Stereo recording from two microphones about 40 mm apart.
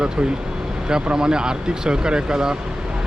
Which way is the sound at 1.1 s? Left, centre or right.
Centre.